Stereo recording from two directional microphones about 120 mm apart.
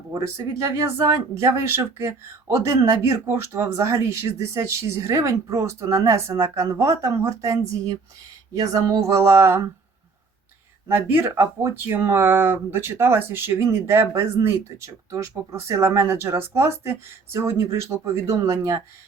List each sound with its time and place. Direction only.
0.1 s speech: 30° right (ahead or behind)
10.8 s speech: 20° right (ahead or behind)